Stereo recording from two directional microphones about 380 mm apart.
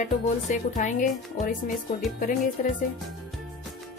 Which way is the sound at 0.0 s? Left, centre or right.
Centre.